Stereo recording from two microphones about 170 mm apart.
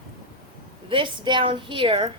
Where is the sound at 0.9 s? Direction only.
30° right (ahead or behind).